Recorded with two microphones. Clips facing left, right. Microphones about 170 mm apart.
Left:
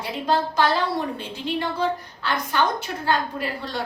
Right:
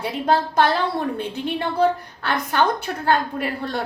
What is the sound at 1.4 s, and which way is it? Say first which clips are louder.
A woman's voice: right 4 dB; 55° right (ahead or behind).